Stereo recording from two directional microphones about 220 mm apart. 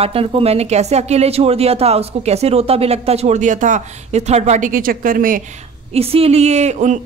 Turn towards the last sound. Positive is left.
turn(degrees=-30)  # may be behind; listen again after turning